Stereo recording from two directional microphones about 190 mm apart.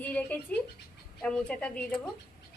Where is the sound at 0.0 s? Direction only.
10° left (ahead or behind).